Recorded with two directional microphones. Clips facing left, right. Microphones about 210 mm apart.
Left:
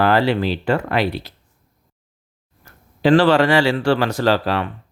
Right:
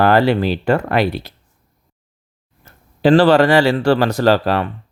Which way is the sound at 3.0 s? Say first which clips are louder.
Right 3 dB; 35° right (ahead or behind).